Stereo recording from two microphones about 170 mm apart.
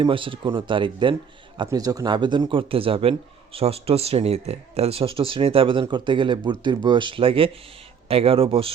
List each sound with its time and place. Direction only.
0.0 s speech: 30° right (ahead or behind)